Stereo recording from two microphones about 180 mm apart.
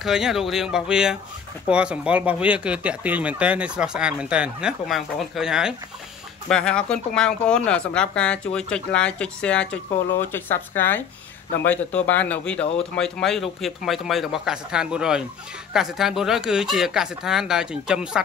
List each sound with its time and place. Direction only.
0.0 s speech: 5° right (ahead or behind)